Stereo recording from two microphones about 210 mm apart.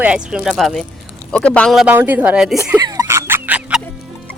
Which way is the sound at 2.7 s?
15° right (ahead or behind).